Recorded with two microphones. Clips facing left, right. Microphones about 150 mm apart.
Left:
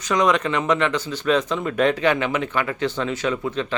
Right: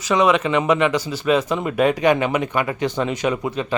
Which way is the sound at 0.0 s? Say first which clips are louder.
Right 2 dB; 5° right (ahead or behind).